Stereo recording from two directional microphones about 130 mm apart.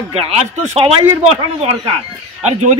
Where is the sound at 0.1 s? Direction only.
50° right (ahead or behind).